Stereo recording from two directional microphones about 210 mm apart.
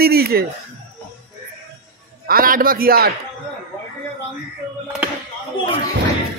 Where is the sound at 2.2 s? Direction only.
45° right (ahead or behind).